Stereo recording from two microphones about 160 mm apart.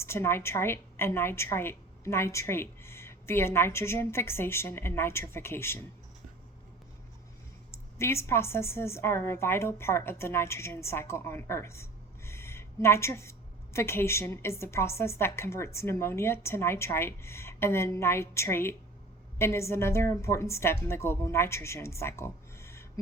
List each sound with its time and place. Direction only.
0.0 s a woman's voice: 15° left (ahead or behind)
7.7 s a woman's voice: 15° left (ahead or behind)